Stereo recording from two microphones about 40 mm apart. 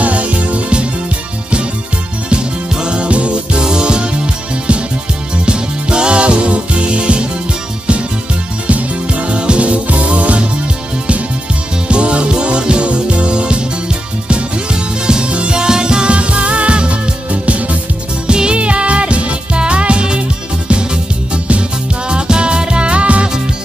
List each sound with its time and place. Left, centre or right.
0.0 s music: right
2.2 s music: right
5.4 s music: right
9.3 s music: right
11.9 s music: right
22.1 s music: right